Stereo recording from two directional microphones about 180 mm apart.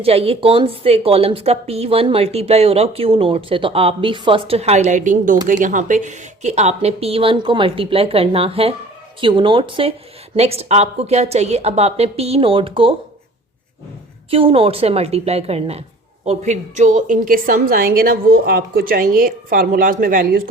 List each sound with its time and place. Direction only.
0.0 s a woman's voice: 35° right (ahead or behind)
14.3 s a woman's voice: 30° right (ahead or behind); by 20.4 s 50° right (ahead or behind)